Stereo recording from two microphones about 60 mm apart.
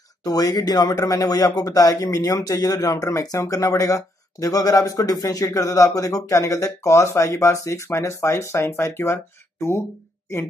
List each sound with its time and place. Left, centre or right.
0.2 s speech: left